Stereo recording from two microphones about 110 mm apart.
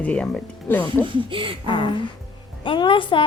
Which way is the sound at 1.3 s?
50° right (ahead or behind).